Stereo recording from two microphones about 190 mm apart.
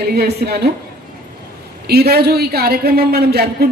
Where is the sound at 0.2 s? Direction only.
55° right (ahead or behind).